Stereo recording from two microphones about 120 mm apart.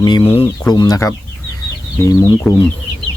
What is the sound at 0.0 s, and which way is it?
Speech, 35° left (ahead or behind).